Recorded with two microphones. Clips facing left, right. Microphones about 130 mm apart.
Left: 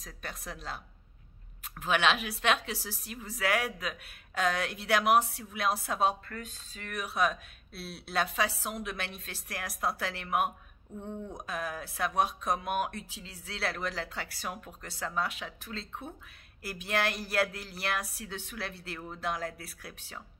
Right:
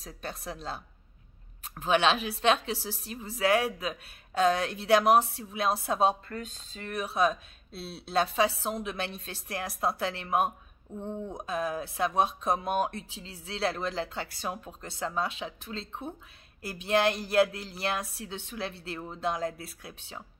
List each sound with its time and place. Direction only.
0.0 s a woman's voice: 25° right (ahead or behind)
1.8 s a woman's voice: 30° right (ahead or behind)